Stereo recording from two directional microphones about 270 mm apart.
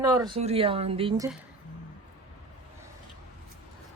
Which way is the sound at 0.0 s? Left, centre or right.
Centre.